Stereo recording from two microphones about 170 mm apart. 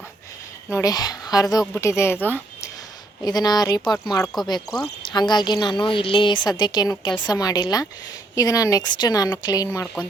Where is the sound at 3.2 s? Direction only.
25° left (ahead or behind).